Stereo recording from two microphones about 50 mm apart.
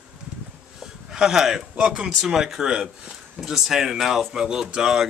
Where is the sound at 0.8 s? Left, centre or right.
Centre.